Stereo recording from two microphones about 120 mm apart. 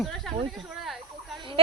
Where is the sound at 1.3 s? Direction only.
45° right (ahead or behind).